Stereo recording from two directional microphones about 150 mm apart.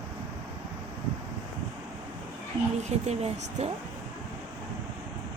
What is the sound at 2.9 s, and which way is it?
Speech, 45° right (ahead or behind).